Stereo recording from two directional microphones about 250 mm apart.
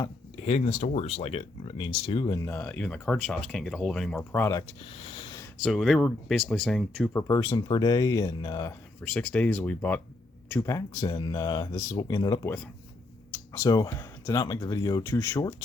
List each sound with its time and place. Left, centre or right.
0.0 s speech: left; by 4.6 s centre
4.9 s a sound: left
5.6 s speech: centre
9.1 s speech: centre